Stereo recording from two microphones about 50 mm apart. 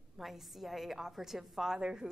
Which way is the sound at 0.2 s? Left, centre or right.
Centre.